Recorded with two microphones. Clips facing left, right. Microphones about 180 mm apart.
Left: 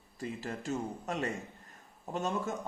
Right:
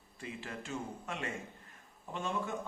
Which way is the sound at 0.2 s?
40° left (ahead or behind).